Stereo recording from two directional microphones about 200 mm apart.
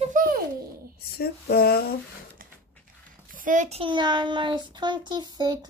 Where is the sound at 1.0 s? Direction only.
50° left (ahead or behind).